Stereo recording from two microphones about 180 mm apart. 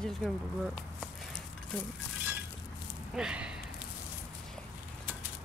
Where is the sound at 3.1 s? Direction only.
5° right (ahead or behind).